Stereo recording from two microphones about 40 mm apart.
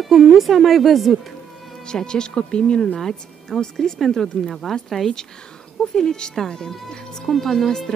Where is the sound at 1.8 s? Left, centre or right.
Centre.